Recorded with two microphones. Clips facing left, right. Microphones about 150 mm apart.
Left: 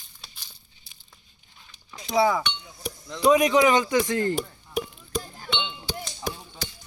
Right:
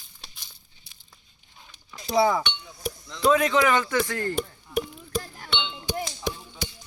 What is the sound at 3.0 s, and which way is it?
Speech, 15° left (ahead or behind).